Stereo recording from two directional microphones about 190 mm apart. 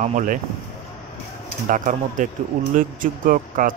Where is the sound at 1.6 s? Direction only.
45° right (ahead or behind).